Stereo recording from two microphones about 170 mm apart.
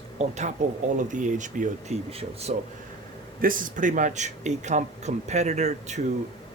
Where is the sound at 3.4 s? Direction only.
55° right (ahead or behind).